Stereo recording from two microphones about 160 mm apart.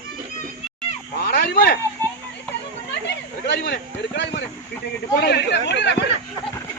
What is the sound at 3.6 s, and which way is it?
Speech, 90° left.